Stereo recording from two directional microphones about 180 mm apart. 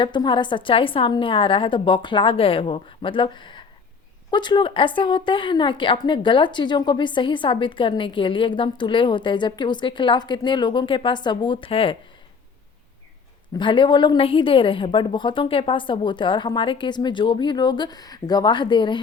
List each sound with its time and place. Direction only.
0.0 s a woman's voice: 25° left (ahead or behind)
13.6 s a woman's voice: 25° left (ahead or behind)